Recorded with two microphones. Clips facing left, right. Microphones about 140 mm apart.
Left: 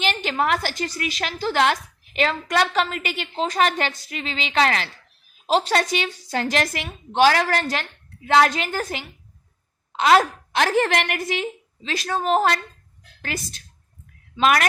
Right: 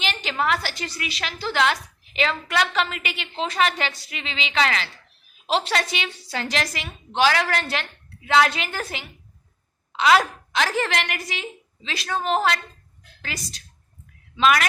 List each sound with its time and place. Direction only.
0.0 s a woman's voice: 50° left (ahead or behind)